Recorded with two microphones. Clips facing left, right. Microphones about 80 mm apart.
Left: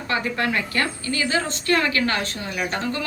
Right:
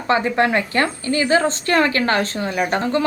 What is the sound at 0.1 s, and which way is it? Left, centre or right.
A woman's voice, right.